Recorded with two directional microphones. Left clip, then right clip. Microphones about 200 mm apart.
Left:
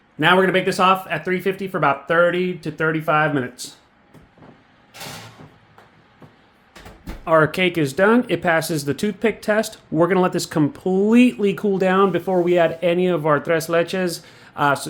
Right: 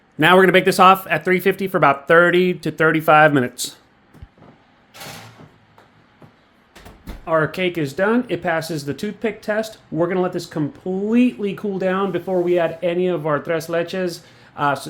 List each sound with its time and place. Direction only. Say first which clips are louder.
0.2 s speech: right 3 dB; 35° right (ahead or behind)
7.3 s speech: left 3 dB; 15° left (ahead or behind)